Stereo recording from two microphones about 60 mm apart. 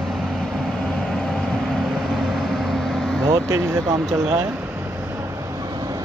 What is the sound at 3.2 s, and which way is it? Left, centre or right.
Speech, right.